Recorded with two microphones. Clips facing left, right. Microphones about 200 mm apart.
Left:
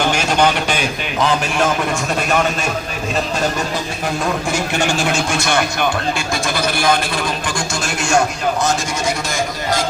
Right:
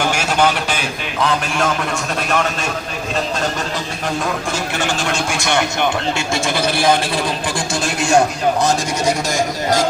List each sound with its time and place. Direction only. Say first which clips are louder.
0.0 s a man's voice: left 1 dB; 5° right (ahead or behind)
4.7 s a sound: left 3 dB; 15° left (ahead or behind)
5.4 s a man's voice: even; 20° right (ahead or behind)